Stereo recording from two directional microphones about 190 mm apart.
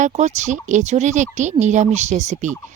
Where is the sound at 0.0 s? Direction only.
40° right (ahead or behind).